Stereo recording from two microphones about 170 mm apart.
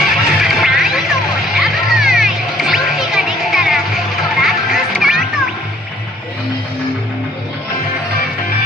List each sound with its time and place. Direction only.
0.0 s music: centre (ahead or behind)